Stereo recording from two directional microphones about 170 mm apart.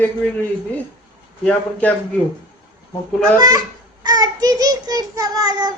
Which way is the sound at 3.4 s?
20° right (ahead or behind).